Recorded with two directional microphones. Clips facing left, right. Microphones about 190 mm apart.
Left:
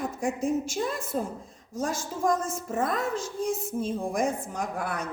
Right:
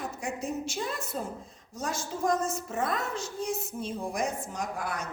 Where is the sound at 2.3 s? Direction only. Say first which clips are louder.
Left 2 dB; 50° left (ahead or behind).